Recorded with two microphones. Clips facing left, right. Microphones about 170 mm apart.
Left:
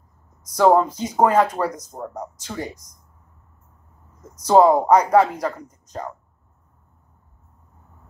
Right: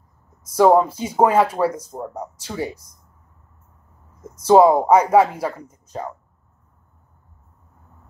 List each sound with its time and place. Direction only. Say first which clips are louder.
0.6 s speech: right 2 dB; 10° right (ahead or behind)
4.2 s speech: right 2 dB; 10° right (ahead or behind)